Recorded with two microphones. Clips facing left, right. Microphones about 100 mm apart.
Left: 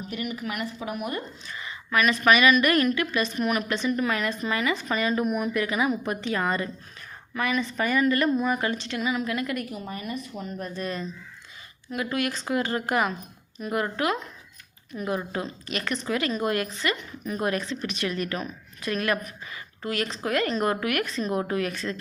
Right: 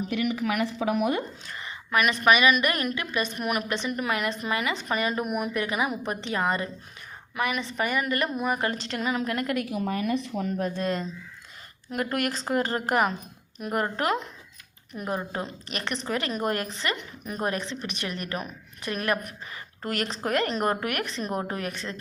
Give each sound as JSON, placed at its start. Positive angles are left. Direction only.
{"t": 0.1, "sound": "speech", "side_deg": -90}
{"t": 1.9, "sound": "a woman's voice", "side_deg": -20}
{"t": 5.2, "sound": "speech", "side_deg": -10}
{"t": 5.5, "sound": "a woman's voice", "side_deg": -25}
{"t": 8.4, "sound": "a woman's voice", "side_deg": -35}
{"t": 9.2, "sound": "a woman's voice", "side_deg": -45}
{"t": 9.6, "sound": "a woman's voice", "side_deg": -80}
{"t": 10.2, "sound": "speech", "side_deg": -70}
{"t": 11.9, "sound": "a woman's voice", "side_deg": -45}
{"t": 13.8, "sound": "a woman's voice", "side_deg": -35}
{"t": 21.0, "sound": "a woman's voice", "side_deg": -20}
{"t": 21.3, "sound": "a woman's voice", "side_deg": -30}
{"t": 21.7, "sound": "a woman's voice", "side_deg": -20}